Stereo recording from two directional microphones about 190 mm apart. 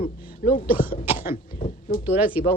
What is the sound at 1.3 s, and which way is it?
Speech, 30° left (ahead or behind).